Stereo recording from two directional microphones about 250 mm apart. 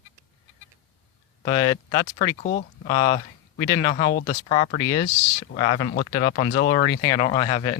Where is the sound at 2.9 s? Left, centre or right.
Centre.